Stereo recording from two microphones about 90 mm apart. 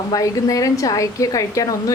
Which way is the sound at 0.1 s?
40° left (ahead or behind).